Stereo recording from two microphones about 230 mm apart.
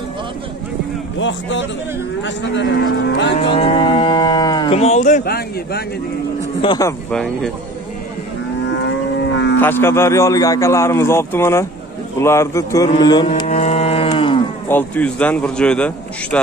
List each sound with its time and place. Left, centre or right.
1.2 s speech: left
3.3 s moo: left
6.6 s a man's voice: centre
7.1 s a man's voice: centre
8.6 s livestock: left
9.6 s a man's voice: centre
12.9 s cattle: centre
14.7 s a man's voice: centre